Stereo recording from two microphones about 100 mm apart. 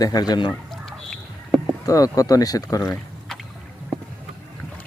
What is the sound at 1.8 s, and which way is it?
Speech, 35° left (ahead or behind).